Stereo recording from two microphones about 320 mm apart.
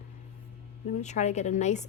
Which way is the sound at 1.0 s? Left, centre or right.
Left.